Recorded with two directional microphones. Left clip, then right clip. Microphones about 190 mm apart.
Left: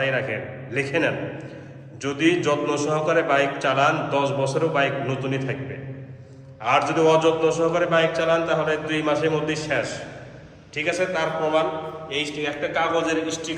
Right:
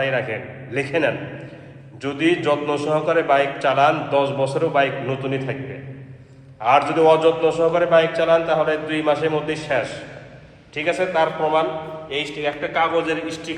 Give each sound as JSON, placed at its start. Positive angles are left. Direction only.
{"t": 0.0, "sound": "a man's voice", "side_deg": 5}
{"t": 6.6, "sound": "a man's voice", "side_deg": 5}
{"t": 13.1, "sound": "a man's voice", "side_deg": -30}